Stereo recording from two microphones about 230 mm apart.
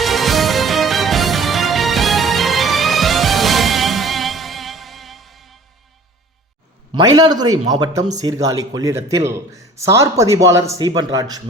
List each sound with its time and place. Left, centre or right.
0.0 s music: centre
6.9 s a man's voice: centre